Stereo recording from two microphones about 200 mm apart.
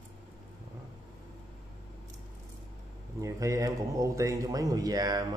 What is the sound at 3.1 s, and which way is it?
A man's voice, 15° right (ahead or behind).